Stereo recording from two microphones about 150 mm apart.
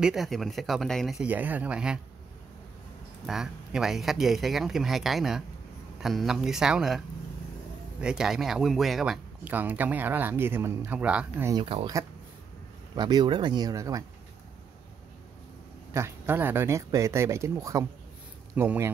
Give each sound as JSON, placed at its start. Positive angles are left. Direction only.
{"t": 0.0, "sound": "speech", "side_deg": 0}
{"t": 3.3, "sound": "speech", "side_deg": -5}
{"t": 8.0, "sound": "speech", "side_deg": -5}
{"t": 11.6, "sound": "speech", "side_deg": -40}
{"t": 12.9, "sound": "speech", "side_deg": -30}
{"t": 15.9, "sound": "speech", "side_deg": -15}